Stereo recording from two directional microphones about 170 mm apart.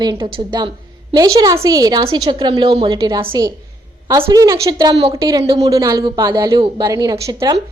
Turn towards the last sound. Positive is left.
turn(degrees=-20)  # may be behind; listen again after turning